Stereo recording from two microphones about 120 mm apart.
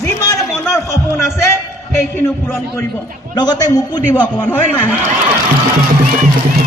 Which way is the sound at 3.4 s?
35° left (ahead or behind).